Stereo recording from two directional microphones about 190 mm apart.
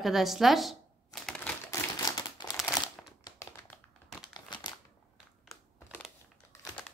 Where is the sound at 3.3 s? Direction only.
15° left (ahead or behind).